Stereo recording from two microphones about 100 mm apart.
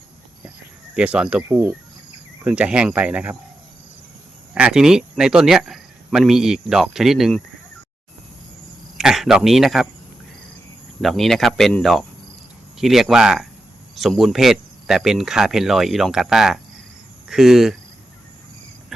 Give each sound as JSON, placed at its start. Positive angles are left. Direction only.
{"t": 0.9, "sound": "speech", "side_deg": -10}
{"t": 1.4, "sound": "speech", "side_deg": -25}
{"t": 2.4, "sound": "speech", "side_deg": -10}
{"t": 4.5, "sound": "speech", "side_deg": -5}
{"t": 9.0, "sound": "speech", "side_deg": -5}
{"t": 11.0, "sound": "speech", "side_deg": 0}